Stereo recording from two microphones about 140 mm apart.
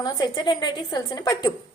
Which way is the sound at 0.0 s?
30° left (ahead or behind).